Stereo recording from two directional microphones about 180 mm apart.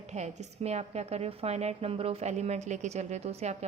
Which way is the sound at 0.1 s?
40° right (ahead or behind).